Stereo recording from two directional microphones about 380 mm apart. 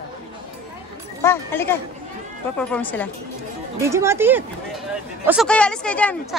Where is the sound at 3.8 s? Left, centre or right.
Centre.